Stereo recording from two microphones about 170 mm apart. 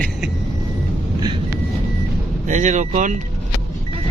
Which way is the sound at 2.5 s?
45° right (ahead or behind).